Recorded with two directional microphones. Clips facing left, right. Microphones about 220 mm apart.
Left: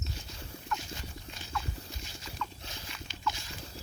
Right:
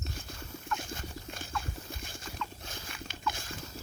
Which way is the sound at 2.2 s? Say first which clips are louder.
Left 1 dB; 50° right (ahead or behind).